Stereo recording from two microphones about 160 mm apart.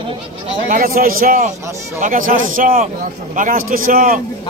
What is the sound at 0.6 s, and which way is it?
A man's voice, 60° right (ahead or behind).